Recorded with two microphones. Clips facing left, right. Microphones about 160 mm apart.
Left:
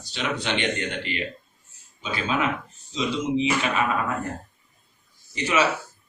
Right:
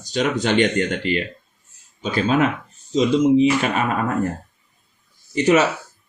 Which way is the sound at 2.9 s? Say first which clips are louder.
Right 10 dB; 45° right (ahead or behind).